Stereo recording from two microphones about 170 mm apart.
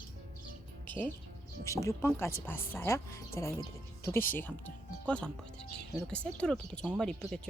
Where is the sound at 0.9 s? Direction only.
10° left (ahead or behind).